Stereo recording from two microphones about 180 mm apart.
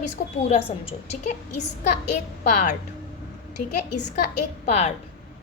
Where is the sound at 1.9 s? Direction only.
45° left (ahead or behind).